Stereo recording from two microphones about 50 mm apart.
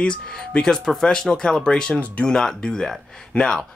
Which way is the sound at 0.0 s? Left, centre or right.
Centre.